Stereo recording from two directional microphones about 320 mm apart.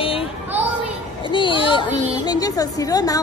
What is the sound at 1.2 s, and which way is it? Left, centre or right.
A woman's voice, centre.